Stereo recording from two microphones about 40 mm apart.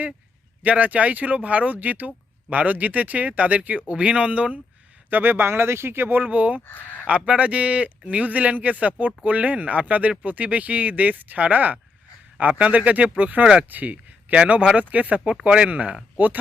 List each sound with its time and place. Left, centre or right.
0.6 s speech: right
5.1 s speech: right
6.2 s speech: right
14.3 s speech: right
14.8 s speech: right
16.1 s speech: right